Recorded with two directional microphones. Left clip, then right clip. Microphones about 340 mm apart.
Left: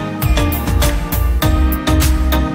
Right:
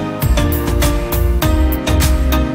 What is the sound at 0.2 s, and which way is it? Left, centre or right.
Music, centre.